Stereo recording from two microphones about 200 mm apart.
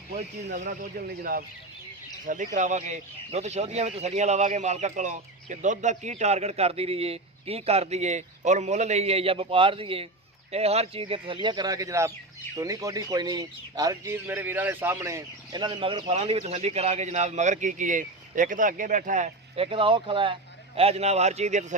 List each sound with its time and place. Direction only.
0.6 s speech: 40° right (ahead or behind)